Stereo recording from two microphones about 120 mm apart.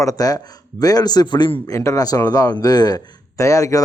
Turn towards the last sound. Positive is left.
turn(degrees=25)  # may be behind; listen again after turning